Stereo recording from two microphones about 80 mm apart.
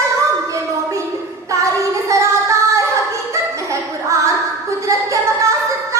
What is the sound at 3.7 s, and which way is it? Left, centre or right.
Music, right.